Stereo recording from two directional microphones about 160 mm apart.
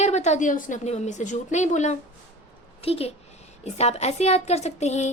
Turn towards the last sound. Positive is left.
turn(degrees=45)  # may be behind; listen again after turning